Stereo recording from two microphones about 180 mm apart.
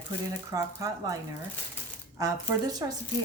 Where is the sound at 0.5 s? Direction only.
15° right (ahead or behind).